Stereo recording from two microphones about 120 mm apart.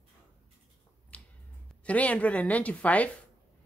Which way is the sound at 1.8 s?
10° left (ahead or behind).